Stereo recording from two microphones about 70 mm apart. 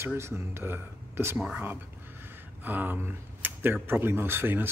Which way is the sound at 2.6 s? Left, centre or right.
Right.